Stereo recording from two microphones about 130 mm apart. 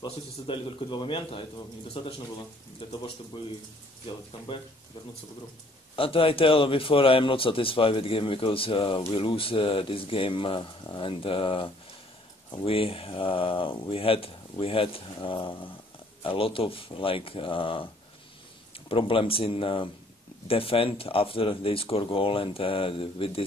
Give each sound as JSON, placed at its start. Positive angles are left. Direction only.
{"t": 0.0, "sound": "a man's voice", "side_deg": 40}
{"t": 5.9, "sound": "speech", "side_deg": 45}
{"t": 18.9, "sound": "speech", "side_deg": 45}